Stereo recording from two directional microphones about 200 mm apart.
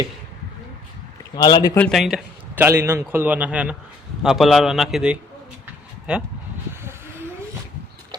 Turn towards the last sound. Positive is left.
turn(degrees=-10)  # may be behind; listen again after turning